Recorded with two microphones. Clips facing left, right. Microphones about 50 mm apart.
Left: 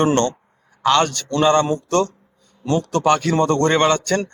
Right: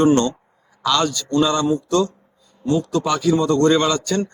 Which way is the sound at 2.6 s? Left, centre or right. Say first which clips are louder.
Left 2 dB; left.